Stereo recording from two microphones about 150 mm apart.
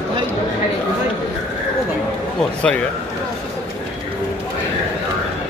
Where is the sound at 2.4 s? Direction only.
5° left (ahead or behind).